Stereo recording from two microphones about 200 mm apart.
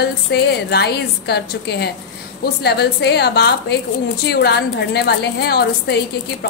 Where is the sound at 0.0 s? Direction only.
55° left (ahead or behind).